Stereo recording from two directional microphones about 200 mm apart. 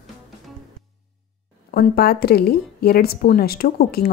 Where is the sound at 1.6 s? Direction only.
50° left (ahead or behind).